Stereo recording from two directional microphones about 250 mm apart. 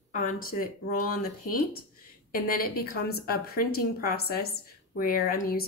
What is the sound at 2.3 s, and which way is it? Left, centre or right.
A woman's voice, left.